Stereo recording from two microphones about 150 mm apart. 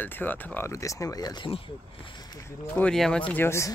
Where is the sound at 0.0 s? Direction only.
10° left (ahead or behind); by 1.6 s 30° left (ahead or behind).